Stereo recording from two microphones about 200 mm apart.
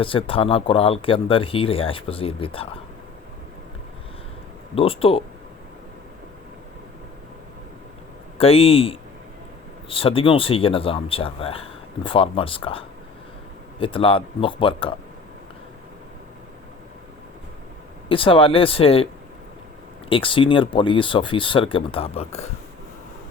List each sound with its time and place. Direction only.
0.0 s speech: 25° left (ahead or behind)
4.7 s speech: 30° left (ahead or behind)
8.4 s speech: 30° left (ahead or behind)
18.1 s speech: 25° left (ahead or behind)
20.1 s speech: 25° left (ahead or behind)